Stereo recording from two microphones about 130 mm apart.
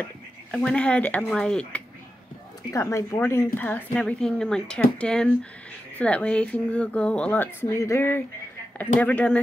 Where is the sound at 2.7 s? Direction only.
25° left (ahead or behind).